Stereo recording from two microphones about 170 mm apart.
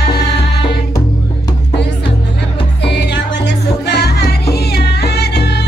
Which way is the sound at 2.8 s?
85° left.